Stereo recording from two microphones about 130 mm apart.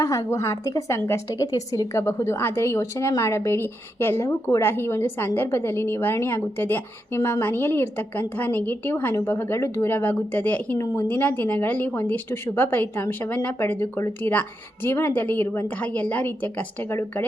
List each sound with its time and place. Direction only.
0.0 s a woman's voice: 20° left (ahead or behind)